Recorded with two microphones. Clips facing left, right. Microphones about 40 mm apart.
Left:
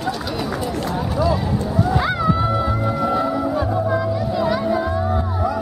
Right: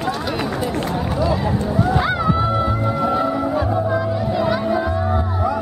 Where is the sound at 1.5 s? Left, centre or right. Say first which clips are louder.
Right 1 dB; centre.